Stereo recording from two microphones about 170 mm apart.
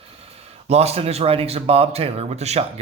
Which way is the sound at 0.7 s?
35° right (ahead or behind).